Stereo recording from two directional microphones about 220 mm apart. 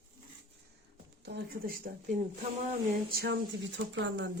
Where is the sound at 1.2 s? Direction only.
45° right (ahead or behind).